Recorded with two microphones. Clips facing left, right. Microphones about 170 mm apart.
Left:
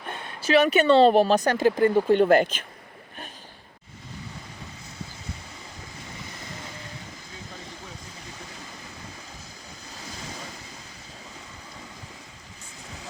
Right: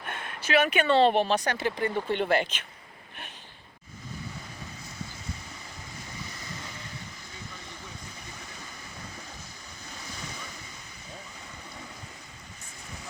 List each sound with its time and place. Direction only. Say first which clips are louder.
0.4 s speech: left 5 dB; 35° left (ahead or behind)